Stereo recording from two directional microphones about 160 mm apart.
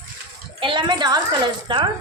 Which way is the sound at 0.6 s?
30° right (ahead or behind).